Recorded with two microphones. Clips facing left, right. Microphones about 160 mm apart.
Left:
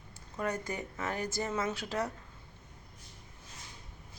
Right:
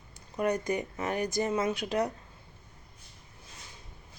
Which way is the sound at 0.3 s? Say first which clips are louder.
Right 6 dB; 15° right (ahead or behind).